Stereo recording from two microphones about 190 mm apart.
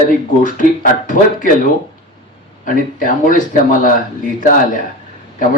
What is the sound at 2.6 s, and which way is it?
A man's voice, 45° left (ahead or behind).